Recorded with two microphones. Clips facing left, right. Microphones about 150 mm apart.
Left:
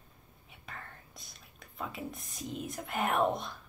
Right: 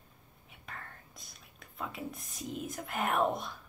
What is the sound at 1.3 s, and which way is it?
Speech, centre (ahead or behind).